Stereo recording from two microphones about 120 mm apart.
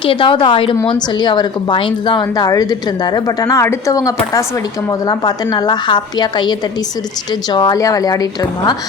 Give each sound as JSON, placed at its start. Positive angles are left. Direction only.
{"t": 0.0, "sound": "a woman's voice", "side_deg": 45}